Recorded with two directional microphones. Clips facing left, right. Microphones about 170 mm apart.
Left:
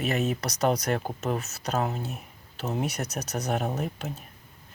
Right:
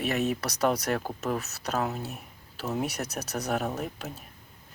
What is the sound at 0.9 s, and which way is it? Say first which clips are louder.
Speech: left 1 dB; 25° left (ahead or behind).